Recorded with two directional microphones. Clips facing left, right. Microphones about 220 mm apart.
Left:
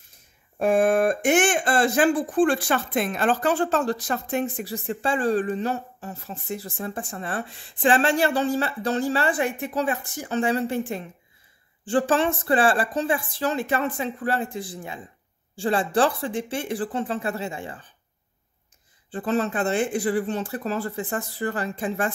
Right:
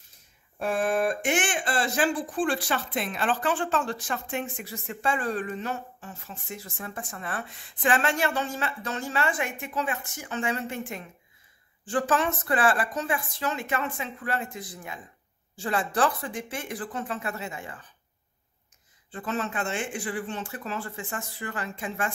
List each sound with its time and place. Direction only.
0.6 s speech: 50° left (ahead or behind); by 17.8 s 30° left (ahead or behind)
19.0 s speech: 35° left (ahead or behind)